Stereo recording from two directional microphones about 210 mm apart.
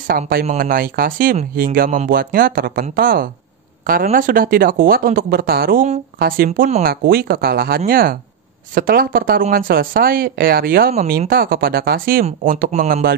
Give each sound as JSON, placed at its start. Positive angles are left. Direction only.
{"t": 0.1, "sound": "speech", "side_deg": -45}